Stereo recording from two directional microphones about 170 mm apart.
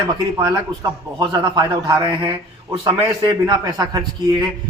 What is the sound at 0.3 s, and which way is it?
A man's voice, 25° right (ahead or behind).